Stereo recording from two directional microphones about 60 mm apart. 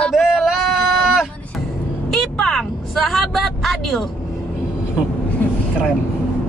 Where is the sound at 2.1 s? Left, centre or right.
Centre.